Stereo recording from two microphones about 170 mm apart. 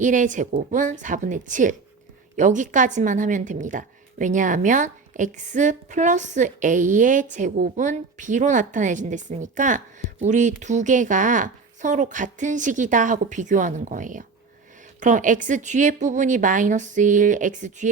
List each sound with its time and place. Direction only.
0.0 s speech: 50° right (ahead or behind)